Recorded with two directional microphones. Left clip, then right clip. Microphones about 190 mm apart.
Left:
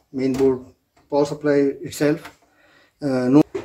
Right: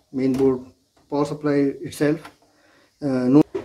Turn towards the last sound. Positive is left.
turn(degrees=0)  # may be behind; listen again after turning